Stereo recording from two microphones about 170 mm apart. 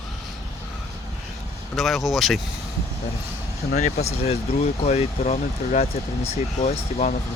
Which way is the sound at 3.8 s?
40° left (ahead or behind).